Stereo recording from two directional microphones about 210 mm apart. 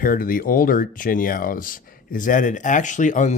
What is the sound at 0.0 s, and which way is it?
Speech, 40° left (ahead or behind).